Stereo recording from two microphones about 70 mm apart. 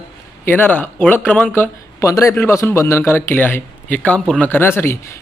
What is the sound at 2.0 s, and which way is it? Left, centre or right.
A man's voice, left.